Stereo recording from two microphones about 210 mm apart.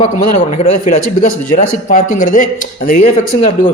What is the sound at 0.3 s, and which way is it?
A man's voice, 35° left (ahead or behind).